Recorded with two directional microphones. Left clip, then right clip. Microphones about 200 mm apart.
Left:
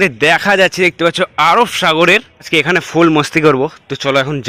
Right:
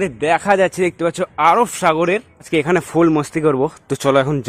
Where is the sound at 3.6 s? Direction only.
20° right (ahead or behind).